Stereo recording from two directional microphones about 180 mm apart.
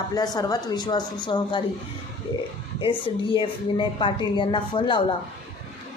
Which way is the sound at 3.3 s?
30° left (ahead or behind).